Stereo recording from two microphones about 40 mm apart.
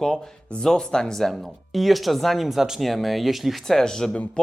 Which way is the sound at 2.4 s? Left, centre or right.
Centre.